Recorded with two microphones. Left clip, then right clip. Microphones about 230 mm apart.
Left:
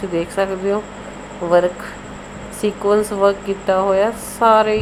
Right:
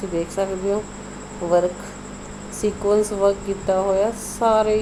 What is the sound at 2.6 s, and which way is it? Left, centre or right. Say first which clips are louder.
Speech: left 3 dB; centre.